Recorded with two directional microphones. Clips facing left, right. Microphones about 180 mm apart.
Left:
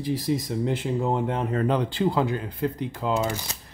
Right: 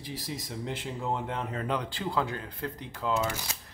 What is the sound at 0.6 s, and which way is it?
Speech, 55° left (ahead or behind).